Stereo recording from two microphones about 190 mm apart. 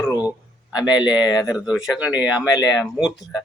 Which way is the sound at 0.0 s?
20° left (ahead or behind).